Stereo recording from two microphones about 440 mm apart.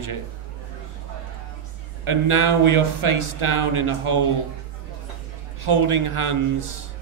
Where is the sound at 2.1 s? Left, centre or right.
Right.